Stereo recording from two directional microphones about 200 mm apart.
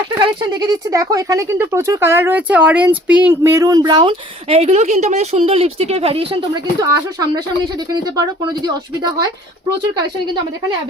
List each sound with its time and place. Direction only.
0.2 s speech: 20° right (ahead or behind)